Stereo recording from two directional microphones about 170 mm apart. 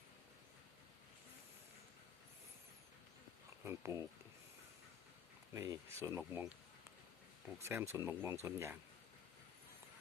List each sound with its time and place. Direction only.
3.6 s a sound: 15° right (ahead or behind)
5.5 s speech: 20° right (ahead or behind)
7.6 s speech: 15° right (ahead or behind)